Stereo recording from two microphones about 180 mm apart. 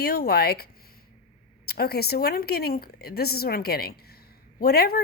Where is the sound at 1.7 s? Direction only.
60° left (ahead or behind).